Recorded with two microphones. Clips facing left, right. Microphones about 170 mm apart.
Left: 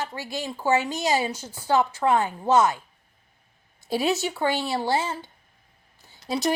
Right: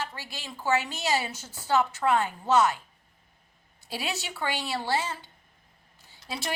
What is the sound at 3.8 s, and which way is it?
Speech, 45° left (ahead or behind).